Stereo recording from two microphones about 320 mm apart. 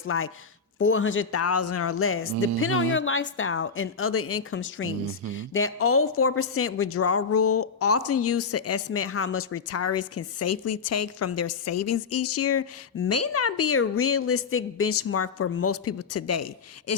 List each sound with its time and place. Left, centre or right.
0.1 s a woman's voice: left